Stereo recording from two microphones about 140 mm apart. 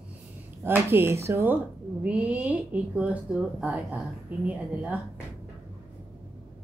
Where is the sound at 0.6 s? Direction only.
15° right (ahead or behind).